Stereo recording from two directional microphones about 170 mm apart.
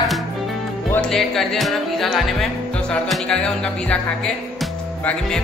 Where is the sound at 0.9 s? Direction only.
5° left (ahead or behind).